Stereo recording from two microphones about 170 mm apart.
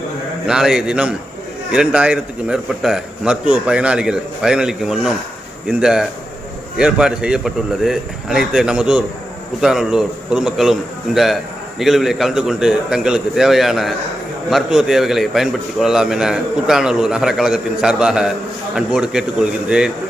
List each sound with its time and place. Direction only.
0.4 s a man's voice: 5° right (ahead or behind)